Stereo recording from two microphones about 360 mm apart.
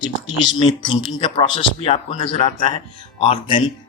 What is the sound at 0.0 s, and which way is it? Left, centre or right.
Speech, centre.